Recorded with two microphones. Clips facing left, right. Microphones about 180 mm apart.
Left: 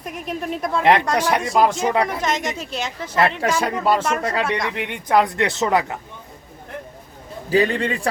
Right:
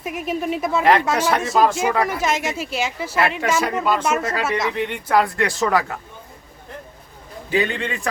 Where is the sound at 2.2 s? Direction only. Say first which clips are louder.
Right 1 dB; 5° right (ahead or behind).